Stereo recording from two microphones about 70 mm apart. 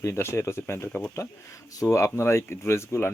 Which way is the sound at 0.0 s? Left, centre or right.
Left.